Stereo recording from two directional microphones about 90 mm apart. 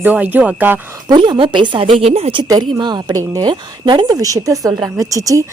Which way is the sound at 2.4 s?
50° right (ahead or behind).